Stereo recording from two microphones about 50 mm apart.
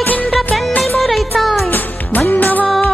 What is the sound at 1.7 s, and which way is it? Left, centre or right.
Music, left.